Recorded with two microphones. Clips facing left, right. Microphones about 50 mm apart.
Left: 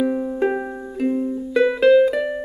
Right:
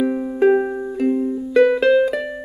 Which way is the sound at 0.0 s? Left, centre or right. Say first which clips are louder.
Right 3 dB; centre.